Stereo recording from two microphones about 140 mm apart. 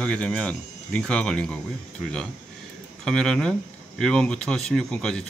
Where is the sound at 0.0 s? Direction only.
10° left (ahead or behind).